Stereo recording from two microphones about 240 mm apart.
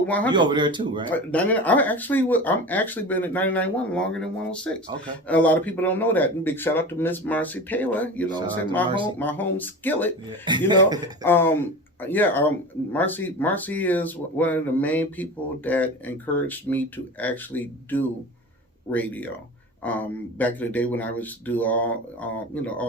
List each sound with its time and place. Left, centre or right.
0.1 s speech: centre
0.3 s speech: centre
1.1 s speech: centre
8.3 s a man's voice: centre
9.1 s speech: centre
10.4 s a man's voice: centre
11.2 s speech: centre